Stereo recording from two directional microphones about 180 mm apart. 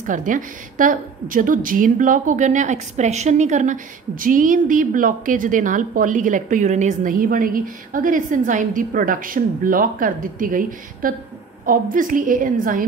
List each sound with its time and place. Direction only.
0.0 s a woman's voice: 45° right (ahead or behind)